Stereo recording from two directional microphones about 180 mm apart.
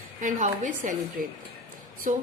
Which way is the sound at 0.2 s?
45° right (ahead or behind).